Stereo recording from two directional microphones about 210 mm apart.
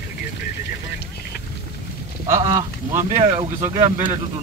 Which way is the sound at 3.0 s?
35° right (ahead or behind).